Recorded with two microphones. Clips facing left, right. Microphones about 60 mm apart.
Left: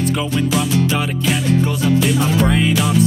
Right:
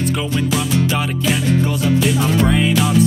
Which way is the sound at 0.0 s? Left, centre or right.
Centre.